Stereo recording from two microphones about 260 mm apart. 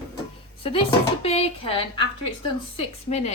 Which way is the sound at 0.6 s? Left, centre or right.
Left.